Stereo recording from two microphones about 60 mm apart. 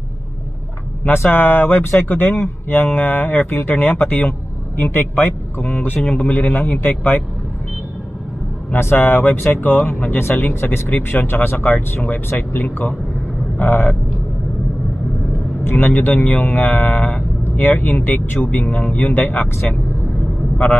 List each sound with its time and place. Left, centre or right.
1.1 s speech: left
8.7 s speech: left
15.6 s speech: left